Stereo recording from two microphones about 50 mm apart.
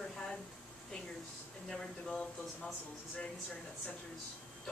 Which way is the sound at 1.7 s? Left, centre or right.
Left.